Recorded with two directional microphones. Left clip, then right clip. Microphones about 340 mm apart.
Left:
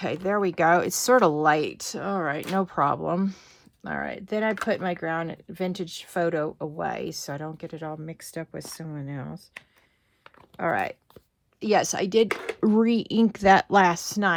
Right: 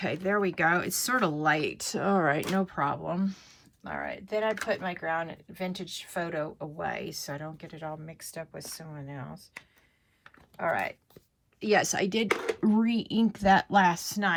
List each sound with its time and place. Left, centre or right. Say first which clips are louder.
0.0 s speech: left 3 dB; centre
10.6 s speech: left 3 dB; centre
12.3 s speech: right 1 dB; centre
12.6 s speech: left 8 dB; centre